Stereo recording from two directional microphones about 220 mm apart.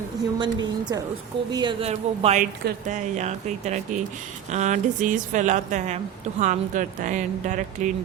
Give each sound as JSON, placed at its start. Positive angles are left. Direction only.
{"t": 0.3, "sound": "a woman's voice", "side_deg": -20}